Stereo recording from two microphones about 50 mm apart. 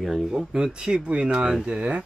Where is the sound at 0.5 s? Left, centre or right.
Centre.